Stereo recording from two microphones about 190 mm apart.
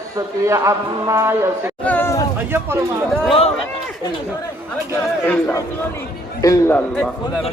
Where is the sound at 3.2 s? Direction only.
30° left (ahead or behind).